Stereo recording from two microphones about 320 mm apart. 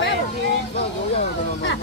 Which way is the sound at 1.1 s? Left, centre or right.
Left.